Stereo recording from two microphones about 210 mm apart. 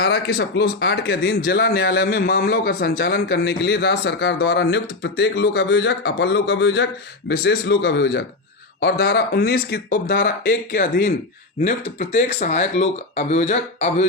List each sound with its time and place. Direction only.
0.0 s a man's voice: 55° left (ahead or behind); by 14.1 s 30° left (ahead or behind)